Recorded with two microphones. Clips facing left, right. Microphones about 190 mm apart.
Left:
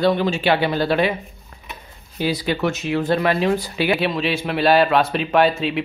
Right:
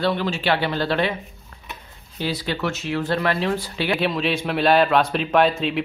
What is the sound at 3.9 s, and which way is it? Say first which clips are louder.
A man's voice: right 1 dB; centre (ahead or behind).